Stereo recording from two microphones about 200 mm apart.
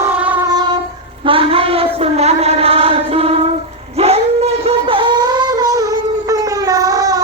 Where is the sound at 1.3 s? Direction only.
25° right (ahead or behind).